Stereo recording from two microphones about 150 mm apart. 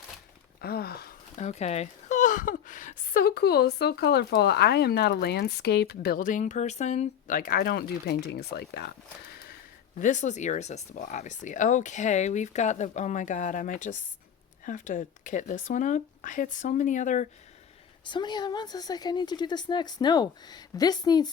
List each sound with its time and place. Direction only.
0.6 s a sound: 90° left
1.4 s speech: 45° left (ahead or behind); by 8.9 s 90° left
10.0 s speech: 55° left (ahead or behind)
18.0 s a woman's voice: 30° left (ahead or behind)